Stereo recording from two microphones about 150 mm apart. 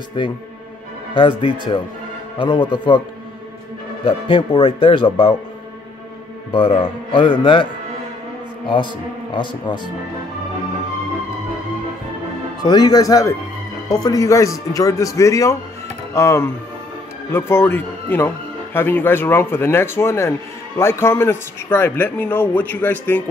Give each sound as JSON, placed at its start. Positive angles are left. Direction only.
{"t": 0.2, "sound": "speech", "side_deg": 30}
{"t": 4.0, "sound": "speech", "side_deg": 35}
{"t": 6.5, "sound": "speech", "side_deg": 35}
{"t": 9.3, "sound": "speech", "side_deg": 30}
{"t": 12.6, "sound": "speech", "side_deg": 25}